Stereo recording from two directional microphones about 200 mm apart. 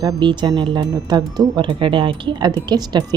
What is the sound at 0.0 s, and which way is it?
Speech, 20° right (ahead or behind).